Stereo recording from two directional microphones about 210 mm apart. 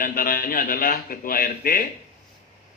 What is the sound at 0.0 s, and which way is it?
A man's voice, 45° left (ahead or behind).